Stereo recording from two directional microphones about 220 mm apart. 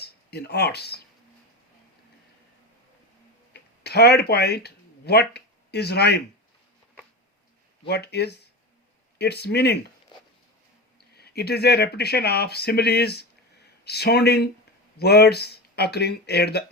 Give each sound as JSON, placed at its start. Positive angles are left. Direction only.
{"t": 0.0, "sound": "speech", "side_deg": 45}
{"t": 3.5, "sound": "speech", "side_deg": 45}
{"t": 7.9, "sound": "speech", "side_deg": 50}
{"t": 11.2, "sound": "speech", "side_deg": 45}